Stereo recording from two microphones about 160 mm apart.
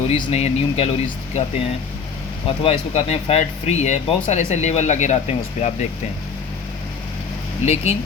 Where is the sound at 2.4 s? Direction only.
35° left (ahead or behind).